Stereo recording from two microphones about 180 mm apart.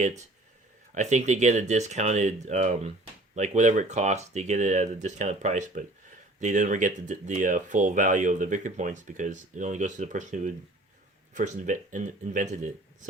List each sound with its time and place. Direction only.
0.9 s speech: 40° right (ahead or behind)